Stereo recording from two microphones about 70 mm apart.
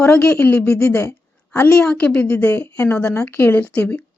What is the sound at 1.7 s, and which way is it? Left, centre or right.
Speech, centre.